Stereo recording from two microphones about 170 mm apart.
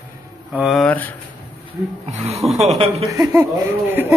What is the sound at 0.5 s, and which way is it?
Speech, centre (ahead or behind).